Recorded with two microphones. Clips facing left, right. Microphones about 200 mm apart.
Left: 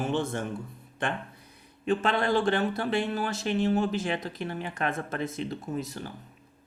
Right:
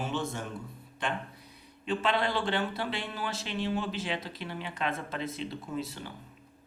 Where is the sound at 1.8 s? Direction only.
45° left (ahead or behind).